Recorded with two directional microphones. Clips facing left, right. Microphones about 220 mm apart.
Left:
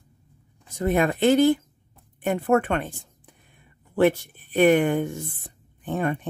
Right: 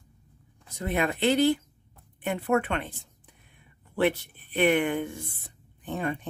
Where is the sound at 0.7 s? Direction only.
45° left (ahead or behind).